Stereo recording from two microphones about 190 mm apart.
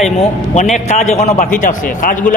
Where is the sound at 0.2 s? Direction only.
40° left (ahead or behind).